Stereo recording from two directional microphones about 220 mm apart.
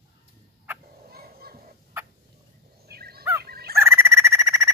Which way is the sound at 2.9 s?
45° right (ahead or behind).